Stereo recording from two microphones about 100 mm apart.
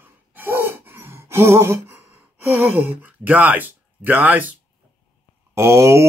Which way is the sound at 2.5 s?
20° right (ahead or behind).